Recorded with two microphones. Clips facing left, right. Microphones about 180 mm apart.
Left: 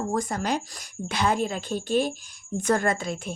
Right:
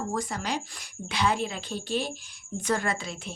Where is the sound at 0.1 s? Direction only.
45° left (ahead or behind).